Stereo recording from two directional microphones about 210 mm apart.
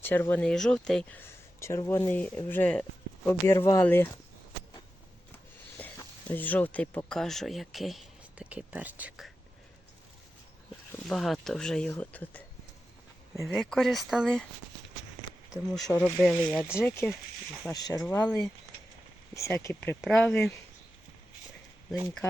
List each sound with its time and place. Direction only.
0.0 s speech: 10° left (ahead or behind)
5.8 s speech: 10° left (ahead or behind)
11.0 s speech: centre (ahead or behind)
16.0 s speech: 5° left (ahead or behind)
17.7 s speech: 15° left (ahead or behind)